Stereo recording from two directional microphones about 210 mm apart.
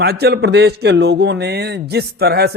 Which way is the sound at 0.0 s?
50° right (ahead or behind).